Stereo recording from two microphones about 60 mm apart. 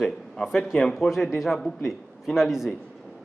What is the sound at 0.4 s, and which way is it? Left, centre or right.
A man's voice, centre.